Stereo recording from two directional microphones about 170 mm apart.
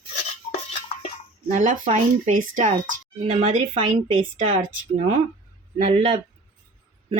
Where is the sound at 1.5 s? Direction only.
45° right (ahead or behind).